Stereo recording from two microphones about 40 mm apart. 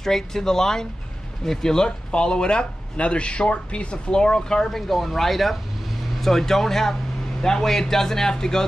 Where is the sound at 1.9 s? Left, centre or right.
Left.